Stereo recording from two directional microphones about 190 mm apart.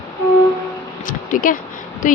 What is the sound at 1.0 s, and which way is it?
Speech, 45° left (ahead or behind).